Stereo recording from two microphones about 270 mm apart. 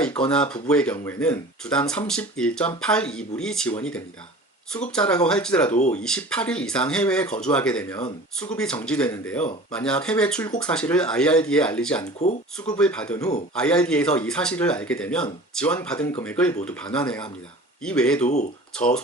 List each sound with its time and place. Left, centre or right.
0.0 s speech: centre
5.7 s speech: left
6.0 s speech: centre